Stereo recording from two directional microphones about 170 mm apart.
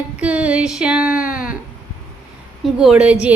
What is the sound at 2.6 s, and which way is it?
Speech, 5° right (ahead or behind).